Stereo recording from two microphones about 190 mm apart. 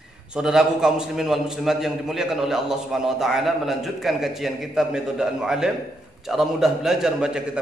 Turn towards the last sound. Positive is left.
turn(degrees=-5)  # may be behind; listen again after turning